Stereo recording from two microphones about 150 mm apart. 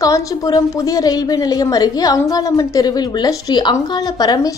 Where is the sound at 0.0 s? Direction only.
25° left (ahead or behind).